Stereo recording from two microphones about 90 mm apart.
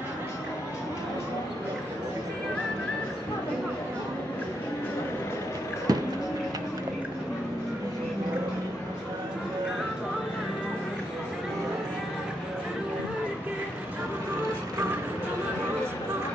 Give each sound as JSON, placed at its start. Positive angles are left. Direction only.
{"t": 5.9, "sound": "music", "side_deg": -45}